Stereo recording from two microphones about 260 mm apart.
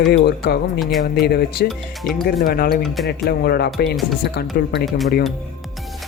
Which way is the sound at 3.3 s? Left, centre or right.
Left.